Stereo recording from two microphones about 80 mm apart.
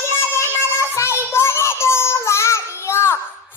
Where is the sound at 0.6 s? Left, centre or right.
Left.